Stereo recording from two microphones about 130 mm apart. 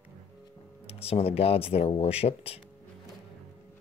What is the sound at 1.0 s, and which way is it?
Speech, 50° left (ahead or behind).